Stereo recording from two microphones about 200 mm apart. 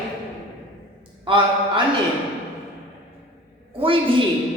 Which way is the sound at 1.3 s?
25° right (ahead or behind).